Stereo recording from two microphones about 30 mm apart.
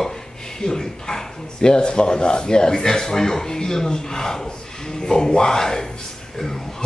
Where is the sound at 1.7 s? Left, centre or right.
Left.